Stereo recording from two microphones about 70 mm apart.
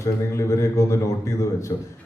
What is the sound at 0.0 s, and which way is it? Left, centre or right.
A man's voice, left.